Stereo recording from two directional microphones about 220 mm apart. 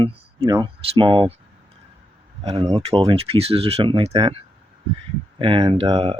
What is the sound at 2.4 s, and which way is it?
Speech, 20° right (ahead or behind).